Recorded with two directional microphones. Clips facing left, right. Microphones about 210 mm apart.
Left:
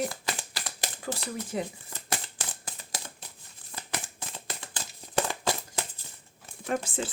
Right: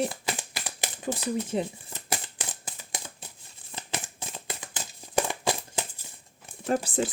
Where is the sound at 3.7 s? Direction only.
20° right (ahead or behind).